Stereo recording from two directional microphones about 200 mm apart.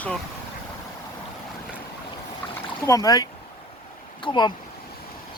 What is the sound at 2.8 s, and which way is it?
Speech, 15° left (ahead or behind).